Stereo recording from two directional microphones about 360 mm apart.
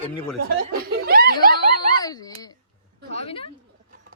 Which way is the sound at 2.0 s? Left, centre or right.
Centre.